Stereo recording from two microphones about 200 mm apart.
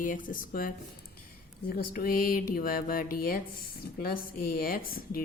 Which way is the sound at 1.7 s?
45° left (ahead or behind).